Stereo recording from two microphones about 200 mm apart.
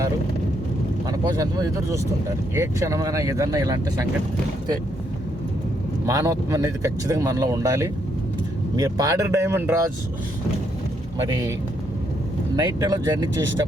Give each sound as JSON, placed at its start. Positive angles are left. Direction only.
{"t": 1.1, "sound": "speech", "side_deg": -20}
{"t": 6.1, "sound": "speech", "side_deg": -15}
{"t": 12.5, "sound": "speech", "side_deg": -20}